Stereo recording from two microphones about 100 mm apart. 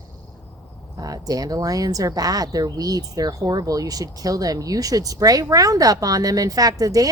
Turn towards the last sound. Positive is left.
turn(degrees=-35)  # may be behind; listen again after turning